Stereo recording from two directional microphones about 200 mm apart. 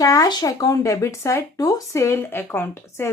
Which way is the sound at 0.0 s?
15° left (ahead or behind).